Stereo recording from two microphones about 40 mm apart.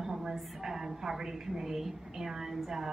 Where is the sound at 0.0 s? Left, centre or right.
Centre.